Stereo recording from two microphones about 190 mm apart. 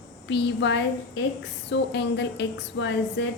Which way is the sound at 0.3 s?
65° left (ahead or behind).